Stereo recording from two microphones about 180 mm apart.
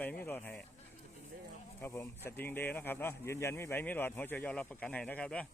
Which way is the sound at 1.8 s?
15° left (ahead or behind).